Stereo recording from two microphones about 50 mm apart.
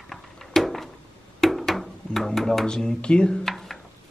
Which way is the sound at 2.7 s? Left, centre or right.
Centre.